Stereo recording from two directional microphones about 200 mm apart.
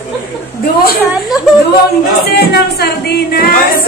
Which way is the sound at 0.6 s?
50° left (ahead or behind).